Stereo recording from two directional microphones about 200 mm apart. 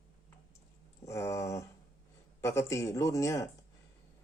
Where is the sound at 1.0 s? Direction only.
15° left (ahead or behind).